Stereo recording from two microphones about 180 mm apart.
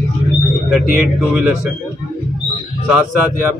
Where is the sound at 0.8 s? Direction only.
50° right (ahead or behind).